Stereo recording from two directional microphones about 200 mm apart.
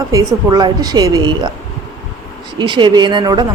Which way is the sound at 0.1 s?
20° right (ahead or behind).